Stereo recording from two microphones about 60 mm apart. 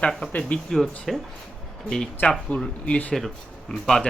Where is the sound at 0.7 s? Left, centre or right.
Centre.